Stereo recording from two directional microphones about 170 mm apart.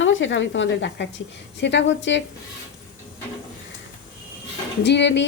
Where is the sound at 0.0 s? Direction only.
90° left.